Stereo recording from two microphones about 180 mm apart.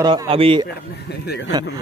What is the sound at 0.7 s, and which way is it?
Speech, 65° left (ahead or behind).